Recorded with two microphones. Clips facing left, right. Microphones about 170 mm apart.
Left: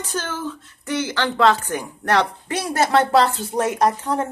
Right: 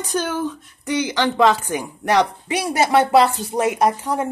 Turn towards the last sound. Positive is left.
turn(degrees=-10)  # may be behind; listen again after turning